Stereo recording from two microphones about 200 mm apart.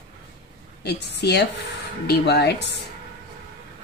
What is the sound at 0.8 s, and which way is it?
A woman's voice, 55° left (ahead or behind).